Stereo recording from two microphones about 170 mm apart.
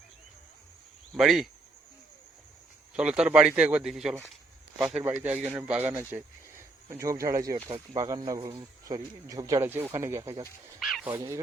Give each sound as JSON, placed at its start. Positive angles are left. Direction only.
{"t": 1.1, "sound": "speech", "side_deg": 0}
{"t": 2.9, "sound": "speech", "side_deg": -5}
{"t": 10.8, "sound": "speech", "side_deg": 0}
{"t": 11.1, "sound": "speech", "side_deg": -20}